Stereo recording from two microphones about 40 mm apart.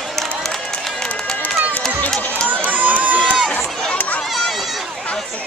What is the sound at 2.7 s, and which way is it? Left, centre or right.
Run, right.